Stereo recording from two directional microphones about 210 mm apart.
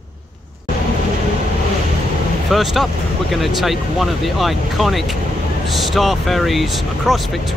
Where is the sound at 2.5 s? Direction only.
Centre (ahead or behind).